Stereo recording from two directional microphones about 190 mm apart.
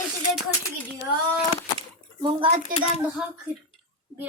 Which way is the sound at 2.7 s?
45° right (ahead or behind).